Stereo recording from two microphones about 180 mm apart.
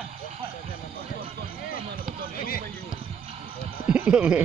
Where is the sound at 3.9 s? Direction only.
10° right (ahead or behind).